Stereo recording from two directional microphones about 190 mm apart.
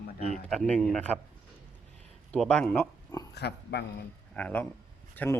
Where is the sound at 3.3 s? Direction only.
60° left (ahead or behind).